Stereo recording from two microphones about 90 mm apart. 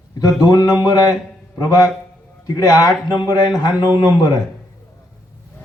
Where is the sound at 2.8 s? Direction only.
45° left (ahead or behind).